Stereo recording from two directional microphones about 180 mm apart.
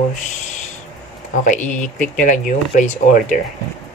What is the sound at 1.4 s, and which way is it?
Speech, 45° left (ahead or behind).